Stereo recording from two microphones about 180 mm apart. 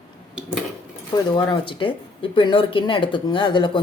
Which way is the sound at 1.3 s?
25° left (ahead or behind).